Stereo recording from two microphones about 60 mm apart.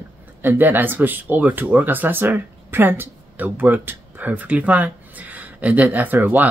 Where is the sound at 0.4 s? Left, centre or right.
Right.